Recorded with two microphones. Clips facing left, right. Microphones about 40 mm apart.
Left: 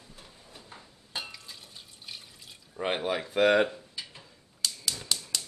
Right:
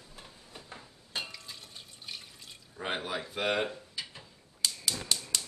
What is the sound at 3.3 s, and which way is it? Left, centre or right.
Speech, left.